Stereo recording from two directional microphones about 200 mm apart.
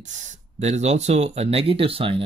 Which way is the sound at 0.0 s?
35° right (ahead or behind).